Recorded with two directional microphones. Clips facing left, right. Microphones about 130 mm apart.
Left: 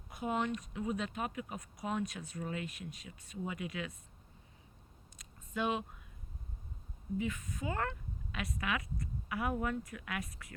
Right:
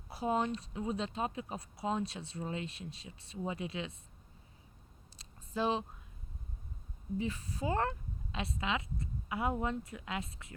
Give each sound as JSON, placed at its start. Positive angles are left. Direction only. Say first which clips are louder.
{"t": 0.1, "sound": "speech", "louder": "right 2 dB", "side_deg": -30}
{"t": 5.1, "sound": "a sound", "louder": "right 2 dB", "side_deg": -30}
{"t": 7.2, "sound": "speech", "louder": "right 1 dB", "side_deg": -30}